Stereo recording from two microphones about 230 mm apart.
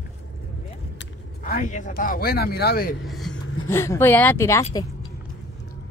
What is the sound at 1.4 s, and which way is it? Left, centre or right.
Speech, left.